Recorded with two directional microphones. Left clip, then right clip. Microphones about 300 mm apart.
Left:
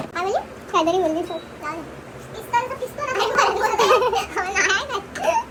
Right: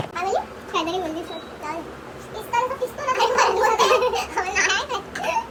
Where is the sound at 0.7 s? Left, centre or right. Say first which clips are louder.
Left 5 dB; centre.